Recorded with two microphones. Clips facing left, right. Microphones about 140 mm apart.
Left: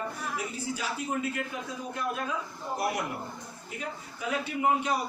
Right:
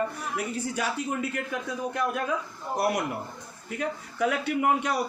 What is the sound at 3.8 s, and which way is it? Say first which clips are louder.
A man's voice: right 10 dB; 65° right (ahead or behind).